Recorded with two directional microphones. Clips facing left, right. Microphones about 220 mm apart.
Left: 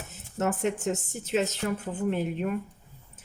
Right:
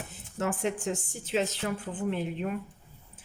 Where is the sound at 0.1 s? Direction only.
45° left (ahead or behind).